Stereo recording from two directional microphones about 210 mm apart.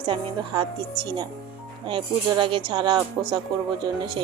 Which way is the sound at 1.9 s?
25° right (ahead or behind).